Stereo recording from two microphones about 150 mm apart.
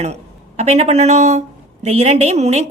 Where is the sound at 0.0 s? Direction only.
45° right (ahead or behind).